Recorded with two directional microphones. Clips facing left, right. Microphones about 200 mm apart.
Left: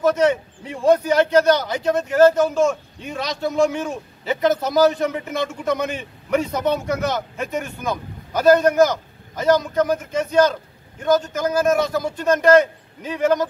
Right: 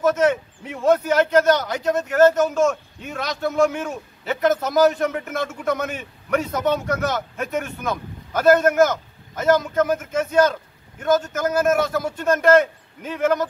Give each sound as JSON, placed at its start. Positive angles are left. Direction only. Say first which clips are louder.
{"t": 0.0, "sound": "a man's voice", "louder": "left 1 dB", "side_deg": -5}